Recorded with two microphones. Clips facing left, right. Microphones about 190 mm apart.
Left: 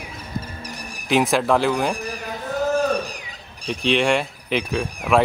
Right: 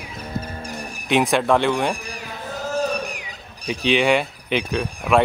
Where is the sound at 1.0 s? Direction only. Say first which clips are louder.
Even; centre (ahead or behind).